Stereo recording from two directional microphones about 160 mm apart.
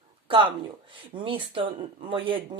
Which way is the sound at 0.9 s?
30° right (ahead or behind).